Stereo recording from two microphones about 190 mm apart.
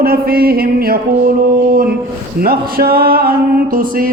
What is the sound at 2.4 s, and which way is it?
Speech, 50° right (ahead or behind).